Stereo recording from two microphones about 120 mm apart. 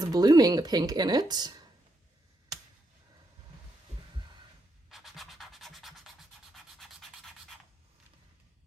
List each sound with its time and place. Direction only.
0.0 s speech: 35° right (ahead or behind)
4.9 s rub: centre (ahead or behind)